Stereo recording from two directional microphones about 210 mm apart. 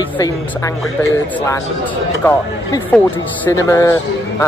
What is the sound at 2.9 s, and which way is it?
Speech, 10° left (ahead or behind).